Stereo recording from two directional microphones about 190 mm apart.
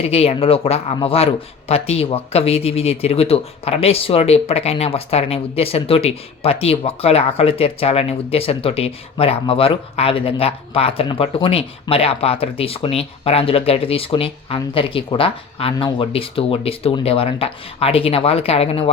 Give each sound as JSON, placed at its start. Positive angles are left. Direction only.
{"t": 0.0, "sound": "speech", "side_deg": 30}